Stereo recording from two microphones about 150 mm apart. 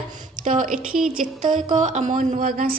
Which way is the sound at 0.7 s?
5° right (ahead or behind).